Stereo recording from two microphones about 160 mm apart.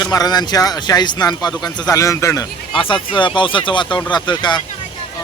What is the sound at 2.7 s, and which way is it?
Speech, 30° left (ahead or behind).